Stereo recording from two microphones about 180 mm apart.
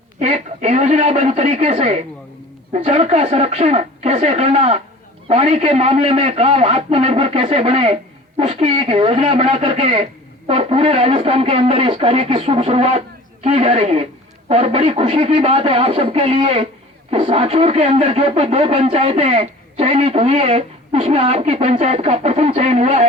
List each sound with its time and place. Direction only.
0.2 s speech: 35° right (ahead or behind)